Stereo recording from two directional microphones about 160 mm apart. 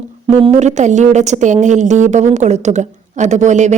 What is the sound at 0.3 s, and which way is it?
A woman's voice, 40° right (ahead or behind).